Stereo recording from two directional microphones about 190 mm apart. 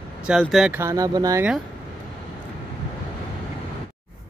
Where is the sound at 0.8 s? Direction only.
15° right (ahead or behind).